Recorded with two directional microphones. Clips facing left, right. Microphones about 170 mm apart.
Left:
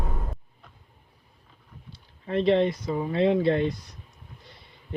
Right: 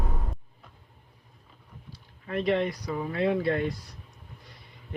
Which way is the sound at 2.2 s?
30° left (ahead or behind).